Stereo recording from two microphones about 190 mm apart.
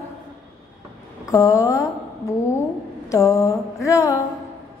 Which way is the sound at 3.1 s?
15° left (ahead or behind).